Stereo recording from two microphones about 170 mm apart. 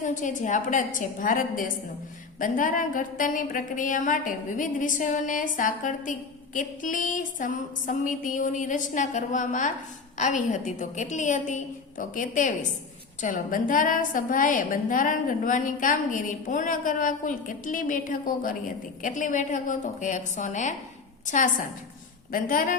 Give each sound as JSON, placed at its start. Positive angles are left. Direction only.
{"t": 0.0, "sound": "a woman's voice", "side_deg": 50}